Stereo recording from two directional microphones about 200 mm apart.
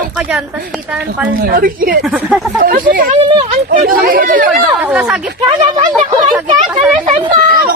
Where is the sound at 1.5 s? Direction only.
50° right (ahead or behind).